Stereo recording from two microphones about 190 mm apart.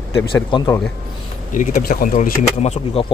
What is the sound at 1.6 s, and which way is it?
Speech, 45° left (ahead or behind).